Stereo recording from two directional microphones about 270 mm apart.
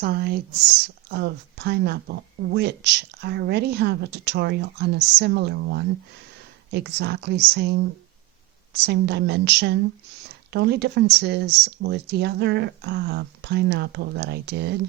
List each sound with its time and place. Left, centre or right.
0.0 s speech: right